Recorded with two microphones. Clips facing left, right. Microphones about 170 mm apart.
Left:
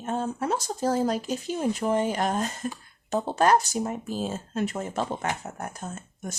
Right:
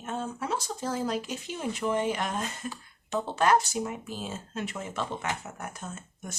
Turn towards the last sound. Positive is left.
turn(degrees=40)  # may be behind; listen again after turning